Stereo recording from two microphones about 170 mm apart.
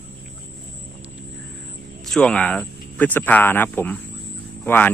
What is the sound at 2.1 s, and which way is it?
Speech, 5° left (ahead or behind).